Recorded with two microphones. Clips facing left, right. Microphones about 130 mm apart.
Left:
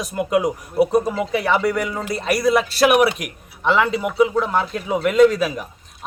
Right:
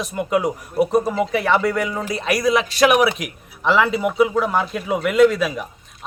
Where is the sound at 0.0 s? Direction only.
Centre (ahead or behind).